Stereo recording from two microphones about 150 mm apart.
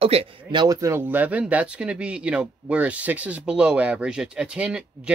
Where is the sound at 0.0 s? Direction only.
40° right (ahead or behind).